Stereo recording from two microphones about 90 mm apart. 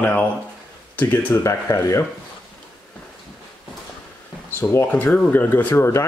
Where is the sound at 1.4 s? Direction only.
30° left (ahead or behind).